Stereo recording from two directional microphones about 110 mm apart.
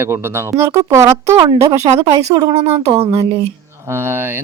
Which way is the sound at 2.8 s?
65° right (ahead or behind).